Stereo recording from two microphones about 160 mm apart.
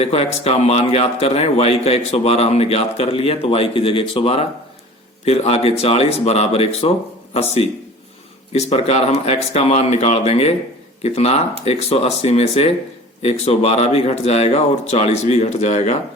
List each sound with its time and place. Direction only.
0.0 s a man's voice: 40° left (ahead or behind)